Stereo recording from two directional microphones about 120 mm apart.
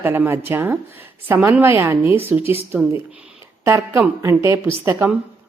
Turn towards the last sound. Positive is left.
turn(degrees=-20)  # may be behind; listen again after turning